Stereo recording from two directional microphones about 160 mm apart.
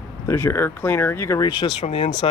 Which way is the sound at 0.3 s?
15° left (ahead or behind).